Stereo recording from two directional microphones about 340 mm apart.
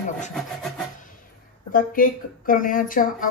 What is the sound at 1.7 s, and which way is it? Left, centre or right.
A woman's voice, left.